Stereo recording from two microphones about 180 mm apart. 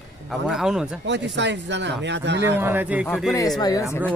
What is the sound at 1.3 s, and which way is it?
Speech, 75° right (ahead or behind).